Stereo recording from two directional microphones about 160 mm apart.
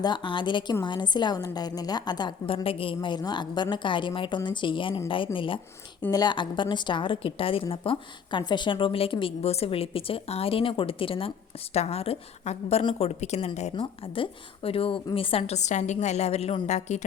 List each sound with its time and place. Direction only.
0.0 s a woman's voice: 30° left (ahead or behind); by 17.0 s 45° left (ahead or behind)